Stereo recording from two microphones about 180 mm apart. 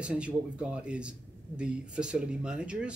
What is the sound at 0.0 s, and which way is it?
Speech, 5° right (ahead or behind).